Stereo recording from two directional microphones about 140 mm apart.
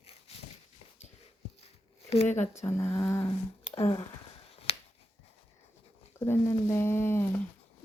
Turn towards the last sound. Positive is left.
turn(degrees=15)  # may be behind; listen again after turning